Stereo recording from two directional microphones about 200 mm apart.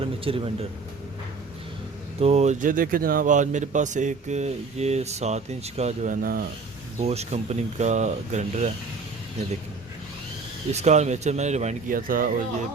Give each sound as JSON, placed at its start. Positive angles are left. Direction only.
{"t": 0.0, "sound": "speech", "side_deg": -25}
{"t": 2.2, "sound": "speech", "side_deg": -35}
{"t": 7.0, "sound": "speech", "side_deg": -30}
{"t": 10.7, "sound": "speech", "side_deg": -35}